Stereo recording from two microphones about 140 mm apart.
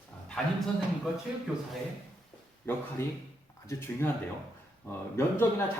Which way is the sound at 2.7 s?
15° left (ahead or behind).